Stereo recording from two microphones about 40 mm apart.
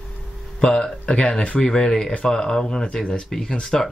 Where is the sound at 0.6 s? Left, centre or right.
Left.